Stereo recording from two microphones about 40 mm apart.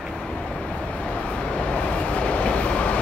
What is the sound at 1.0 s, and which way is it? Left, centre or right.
Vehicle, left.